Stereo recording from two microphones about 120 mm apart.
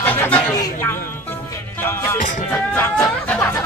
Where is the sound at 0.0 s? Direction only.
15° left (ahead or behind).